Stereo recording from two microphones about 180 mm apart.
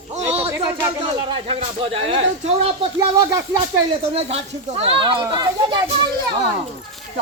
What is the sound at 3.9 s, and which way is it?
Speech, 30° right (ahead or behind).